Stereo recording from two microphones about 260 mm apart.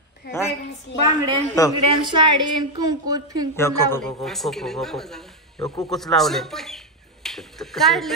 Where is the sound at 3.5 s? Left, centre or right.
Centre.